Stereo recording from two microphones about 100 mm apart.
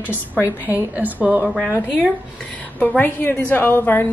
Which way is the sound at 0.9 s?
15° right (ahead or behind).